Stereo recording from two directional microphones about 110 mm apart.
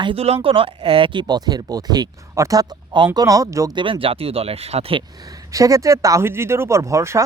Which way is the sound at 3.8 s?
55° right (ahead or behind).